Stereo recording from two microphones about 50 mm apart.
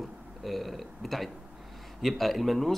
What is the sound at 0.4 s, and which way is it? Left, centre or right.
Speech, centre.